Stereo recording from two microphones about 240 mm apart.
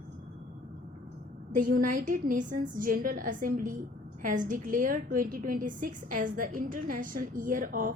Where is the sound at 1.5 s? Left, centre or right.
Right.